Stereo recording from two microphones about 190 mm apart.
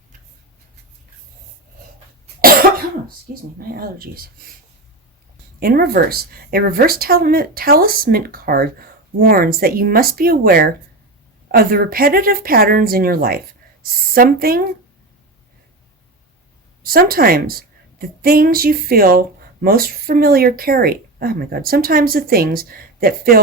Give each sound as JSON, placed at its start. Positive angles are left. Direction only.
{"t": 2.4, "sound": "cough", "side_deg": -50}
{"t": 3.7, "sound": "speech", "side_deg": -50}
{"t": 5.5, "sound": "speech", "side_deg": -50}
{"t": 16.8, "sound": "speech", "side_deg": -50}